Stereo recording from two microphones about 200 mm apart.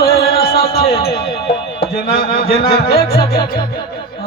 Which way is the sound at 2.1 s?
50° left (ahead or behind).